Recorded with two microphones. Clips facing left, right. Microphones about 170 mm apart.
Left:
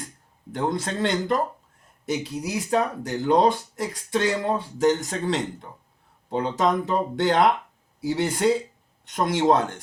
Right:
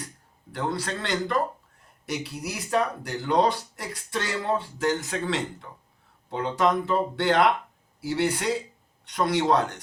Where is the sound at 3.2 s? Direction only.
45° left (ahead or behind).